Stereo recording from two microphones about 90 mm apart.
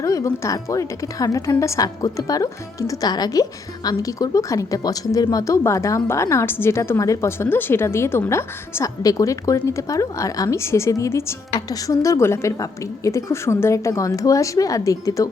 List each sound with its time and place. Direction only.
0.0 s speech: 40° left (ahead or behind)